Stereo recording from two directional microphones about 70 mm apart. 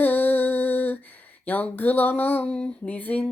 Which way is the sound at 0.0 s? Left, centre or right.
Left.